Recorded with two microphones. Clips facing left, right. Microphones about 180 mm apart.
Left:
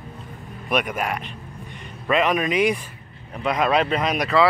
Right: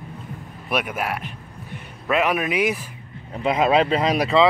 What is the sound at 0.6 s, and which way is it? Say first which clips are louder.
A man's voice: left 1 dB; 5° right (ahead or behind).